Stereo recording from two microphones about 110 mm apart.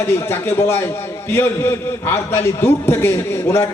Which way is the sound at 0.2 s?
20° left (ahead or behind).